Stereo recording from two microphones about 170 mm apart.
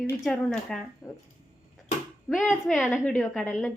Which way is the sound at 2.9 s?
10° left (ahead or behind).